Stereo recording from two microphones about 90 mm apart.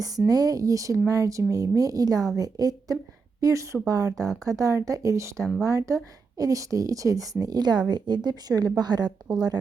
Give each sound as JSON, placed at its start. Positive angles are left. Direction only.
{"t": 0.3, "sound": "a woman's voice", "side_deg": -45}